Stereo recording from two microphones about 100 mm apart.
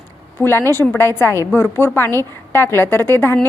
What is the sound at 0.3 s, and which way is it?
A woman's voice, 25° left (ahead or behind).